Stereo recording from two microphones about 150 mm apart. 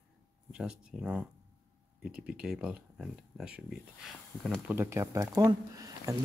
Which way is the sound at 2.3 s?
5° right (ahead or behind).